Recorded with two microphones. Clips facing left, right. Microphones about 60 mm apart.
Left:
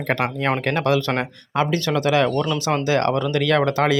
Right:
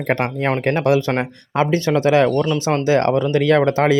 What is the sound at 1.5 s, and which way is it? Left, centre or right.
Speech, right.